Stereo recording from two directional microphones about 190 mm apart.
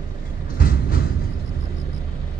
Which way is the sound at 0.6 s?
50° left (ahead or behind).